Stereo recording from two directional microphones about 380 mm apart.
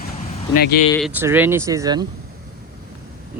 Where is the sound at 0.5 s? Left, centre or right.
Left.